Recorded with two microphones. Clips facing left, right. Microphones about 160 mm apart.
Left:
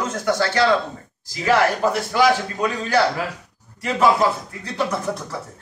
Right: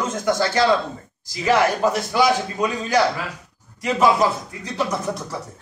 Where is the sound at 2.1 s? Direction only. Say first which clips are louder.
Left 1 dB; 15° right (ahead or behind).